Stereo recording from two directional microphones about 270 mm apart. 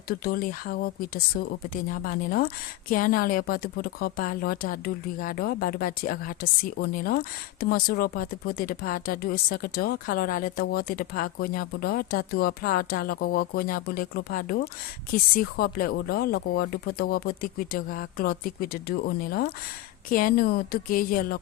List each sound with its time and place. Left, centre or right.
0.1 s a woman's voice: left